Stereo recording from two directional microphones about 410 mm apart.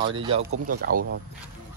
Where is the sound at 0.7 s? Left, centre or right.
Right.